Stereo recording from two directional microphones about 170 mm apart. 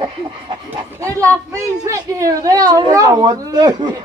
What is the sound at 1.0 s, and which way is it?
A woman's voice, 20° right (ahead or behind).